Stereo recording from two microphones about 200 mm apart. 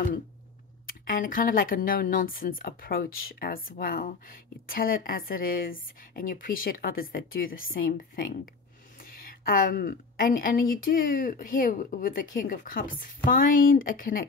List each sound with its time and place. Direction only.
0.8 s a woman's voice: 45° left (ahead or behind)